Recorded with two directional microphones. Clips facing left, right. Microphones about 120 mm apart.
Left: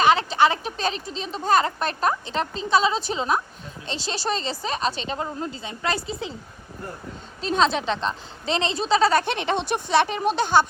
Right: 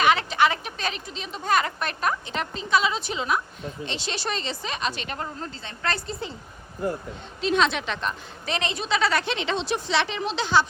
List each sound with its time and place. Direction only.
0.0 s speech: 30° left (ahead or behind); by 6.0 s 10° left (ahead or behind)
6.1 s a woman's voice: centre (ahead or behind)
7.4 s speech: 35° left (ahead or behind); by 10.7 s 50° left (ahead or behind)